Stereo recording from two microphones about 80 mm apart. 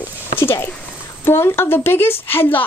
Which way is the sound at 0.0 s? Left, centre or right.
Left.